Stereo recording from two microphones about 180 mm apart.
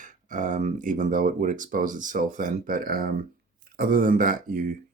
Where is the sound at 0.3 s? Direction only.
45° right (ahead or behind).